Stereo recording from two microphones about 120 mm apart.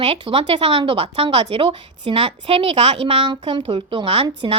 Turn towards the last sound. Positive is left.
turn(degrees=-50)  # may be behind; listen again after turning